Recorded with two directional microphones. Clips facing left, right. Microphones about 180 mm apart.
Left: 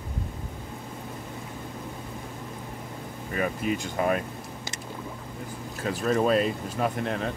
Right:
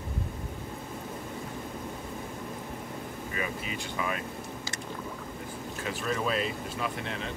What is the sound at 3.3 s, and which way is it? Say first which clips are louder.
Speech: left 9 dB; 50° left (ahead or behind).